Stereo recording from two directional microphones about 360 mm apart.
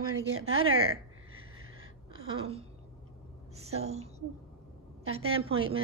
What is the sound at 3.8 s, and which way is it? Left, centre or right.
Speech, centre.